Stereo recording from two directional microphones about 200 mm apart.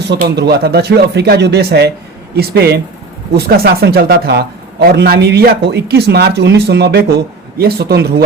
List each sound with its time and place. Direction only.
0.2 s a man's voice: 55° right (ahead or behind)